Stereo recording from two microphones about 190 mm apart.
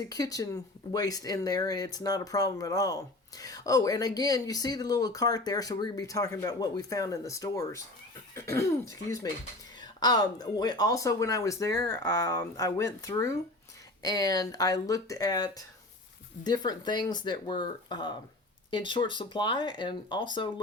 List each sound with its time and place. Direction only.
0.1 s speech: 20° left (ahead or behind)